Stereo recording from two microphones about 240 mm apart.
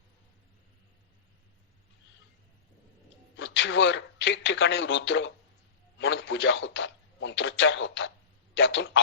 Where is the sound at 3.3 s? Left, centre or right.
Left.